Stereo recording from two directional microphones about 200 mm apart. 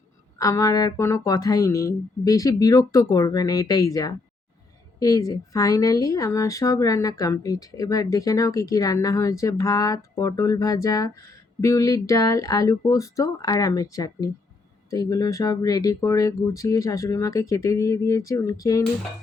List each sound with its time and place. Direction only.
0.3 s speech: 15° left (ahead or behind)